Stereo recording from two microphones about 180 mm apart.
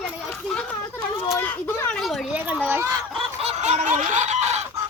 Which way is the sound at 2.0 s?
Centre (ahead or behind).